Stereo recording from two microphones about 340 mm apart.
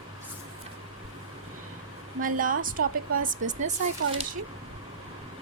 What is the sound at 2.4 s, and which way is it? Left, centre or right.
A woman's voice, right.